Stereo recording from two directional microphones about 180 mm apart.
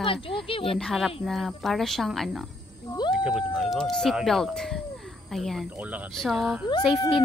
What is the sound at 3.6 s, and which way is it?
Speech, centre (ahead or behind).